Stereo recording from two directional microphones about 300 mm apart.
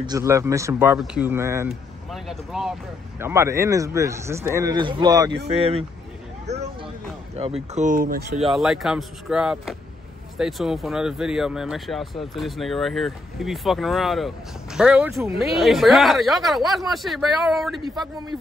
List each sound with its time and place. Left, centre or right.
0.0 s speech: centre
6.4 s a sound: right
7.3 s speech: centre
8.4 s speech: centre